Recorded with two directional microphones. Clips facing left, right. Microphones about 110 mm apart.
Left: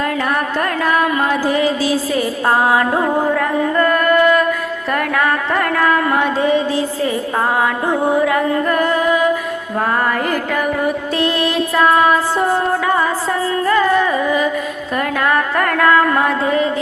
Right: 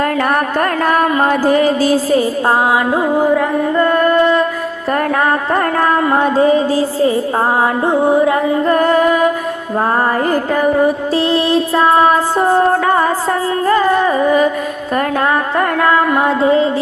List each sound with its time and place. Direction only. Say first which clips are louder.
0.0 s music: right 4 dB; 50° right (ahead or behind)
2.5 s music: left 1 dB; 15° right (ahead or behind)
3.8 s music: right 2 dB; 30° right (ahead or behind)
4.9 s speech: right 3 dB; 35° right (ahead or behind)
7.6 s music: right 3 dB; 25° right (ahead or behind)
8.8 s music: right 4 dB; 50° right (ahead or behind)
10.2 s music: right 5 dB; 30° right (ahead or behind)
13.7 s carnatic music: right 2 dB; 35° right (ahead or behind)
15.2 s music: right 2 dB; 25° right (ahead or behind)